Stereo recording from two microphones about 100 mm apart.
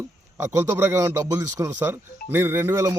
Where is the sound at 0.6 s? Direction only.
35° right (ahead or behind).